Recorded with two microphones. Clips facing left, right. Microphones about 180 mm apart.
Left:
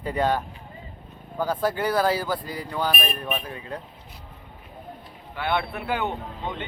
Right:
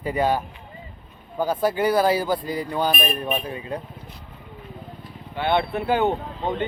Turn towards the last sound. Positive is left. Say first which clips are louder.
# right 6 dB
turn(degrees=-35)  # may be behind; listen again after turning